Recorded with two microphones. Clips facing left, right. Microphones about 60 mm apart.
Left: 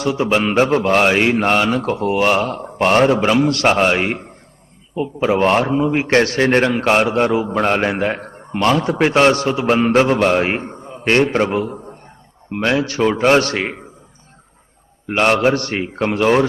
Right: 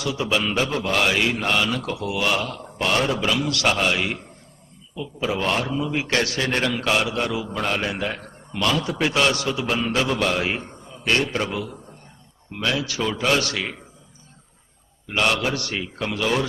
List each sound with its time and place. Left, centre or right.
0.0 s a man's voice: left
15.0 s a man's voice: left